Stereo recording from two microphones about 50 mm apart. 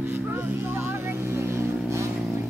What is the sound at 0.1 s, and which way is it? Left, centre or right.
Vehicle, right.